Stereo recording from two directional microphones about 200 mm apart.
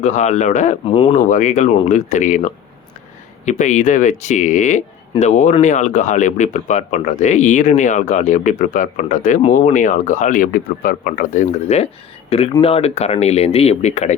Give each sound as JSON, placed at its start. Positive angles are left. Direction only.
{"t": 0.0, "sound": "speech", "side_deg": 35}